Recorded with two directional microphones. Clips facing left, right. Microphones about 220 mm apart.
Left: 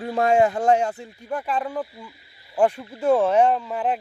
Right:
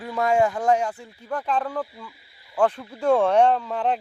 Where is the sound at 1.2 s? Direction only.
10° left (ahead or behind).